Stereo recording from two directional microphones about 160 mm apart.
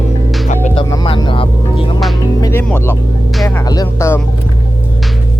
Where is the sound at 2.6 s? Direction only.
15° left (ahead or behind).